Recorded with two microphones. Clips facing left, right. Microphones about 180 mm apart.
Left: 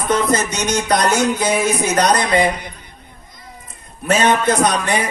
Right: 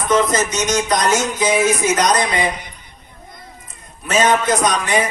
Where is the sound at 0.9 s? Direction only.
60° left (ahead or behind).